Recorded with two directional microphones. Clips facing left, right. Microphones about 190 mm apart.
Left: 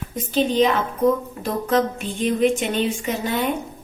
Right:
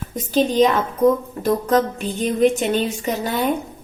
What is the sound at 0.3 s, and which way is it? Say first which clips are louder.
A woman's voice: right 2 dB; 40° right (ahead or behind).